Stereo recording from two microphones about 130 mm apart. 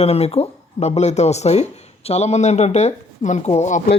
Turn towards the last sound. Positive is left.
turn(degrees=65)  # may be behind; listen again after turning